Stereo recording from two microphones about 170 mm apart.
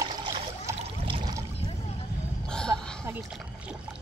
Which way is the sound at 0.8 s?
35° right (ahead or behind).